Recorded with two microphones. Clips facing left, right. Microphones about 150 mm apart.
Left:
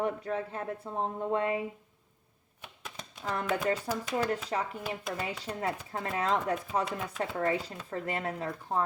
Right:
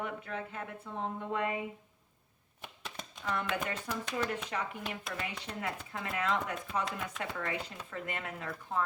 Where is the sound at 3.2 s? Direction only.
40° left (ahead or behind).